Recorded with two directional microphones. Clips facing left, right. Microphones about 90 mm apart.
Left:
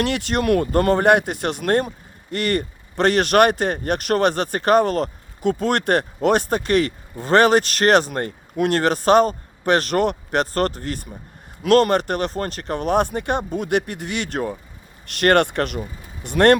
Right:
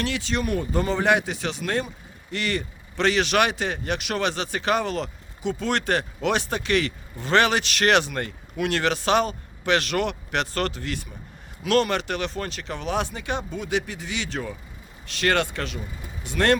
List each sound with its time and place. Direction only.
0.0 s speech: 60° left (ahead or behind)